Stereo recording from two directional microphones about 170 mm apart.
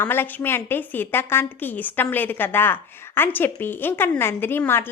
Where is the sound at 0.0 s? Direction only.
15° left (ahead or behind).